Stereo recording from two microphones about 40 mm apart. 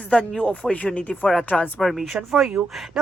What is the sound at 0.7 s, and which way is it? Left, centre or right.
Speech, left.